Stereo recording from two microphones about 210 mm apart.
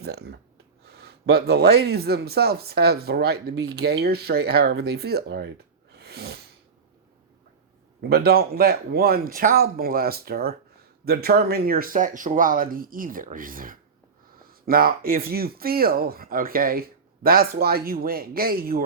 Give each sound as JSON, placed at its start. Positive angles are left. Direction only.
{"t": 0.0, "sound": "speech", "side_deg": -50}
{"t": 6.0, "sound": "sneeze", "side_deg": -50}
{"t": 8.1, "sound": "speech", "side_deg": -45}